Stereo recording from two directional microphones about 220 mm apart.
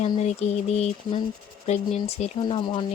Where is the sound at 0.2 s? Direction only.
30° left (ahead or behind).